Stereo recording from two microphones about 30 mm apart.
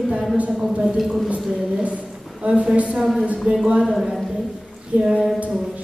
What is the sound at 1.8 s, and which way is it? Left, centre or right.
Speech, right.